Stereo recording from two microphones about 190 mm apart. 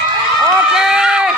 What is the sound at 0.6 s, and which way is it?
Run, 5° right (ahead or behind).